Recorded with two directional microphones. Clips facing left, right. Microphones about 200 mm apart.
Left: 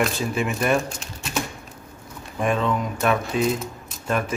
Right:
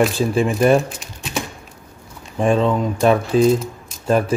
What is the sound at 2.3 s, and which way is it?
Speech, 30° right (ahead or behind).